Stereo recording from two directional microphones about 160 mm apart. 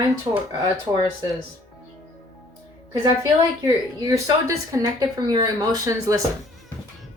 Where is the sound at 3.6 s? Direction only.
20° right (ahead or behind).